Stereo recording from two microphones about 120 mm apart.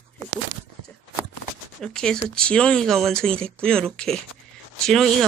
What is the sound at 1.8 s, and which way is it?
Speech, 5° left (ahead or behind).